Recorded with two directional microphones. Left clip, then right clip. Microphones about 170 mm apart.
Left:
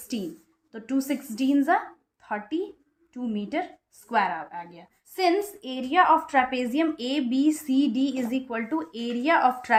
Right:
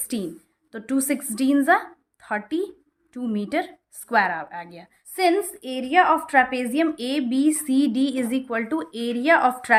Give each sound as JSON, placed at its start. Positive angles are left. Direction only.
{"t": 0.7, "sound": "a woman's voice", "side_deg": -40}
{"t": 5.1, "sound": "a woman's voice", "side_deg": -20}